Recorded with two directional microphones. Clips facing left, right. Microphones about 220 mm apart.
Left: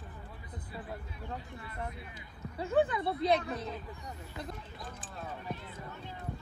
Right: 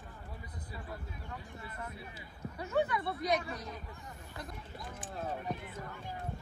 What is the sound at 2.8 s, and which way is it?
Speech, 25° left (ahead or behind).